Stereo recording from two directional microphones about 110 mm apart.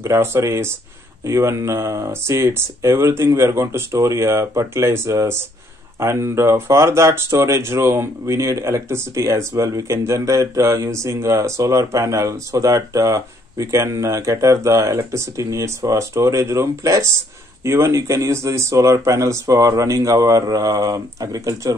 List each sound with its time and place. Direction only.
0.0 s speech: 25° right (ahead or behind)